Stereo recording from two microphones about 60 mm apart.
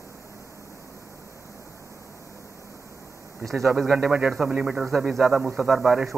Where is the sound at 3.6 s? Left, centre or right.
Centre.